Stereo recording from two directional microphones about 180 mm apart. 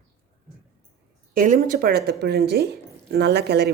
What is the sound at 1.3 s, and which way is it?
A woman's voice, 45° right (ahead or behind).